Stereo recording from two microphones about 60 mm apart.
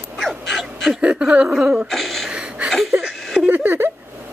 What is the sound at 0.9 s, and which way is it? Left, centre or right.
Speech, centre.